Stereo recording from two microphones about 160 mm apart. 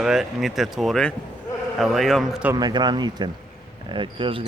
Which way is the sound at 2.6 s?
25° right (ahead or behind).